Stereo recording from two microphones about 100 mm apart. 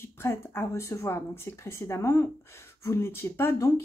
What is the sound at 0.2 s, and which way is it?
A woman's voice, 25° left (ahead or behind).